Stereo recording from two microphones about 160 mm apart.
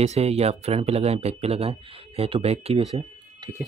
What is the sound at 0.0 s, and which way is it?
Speech, 40° right (ahead or behind).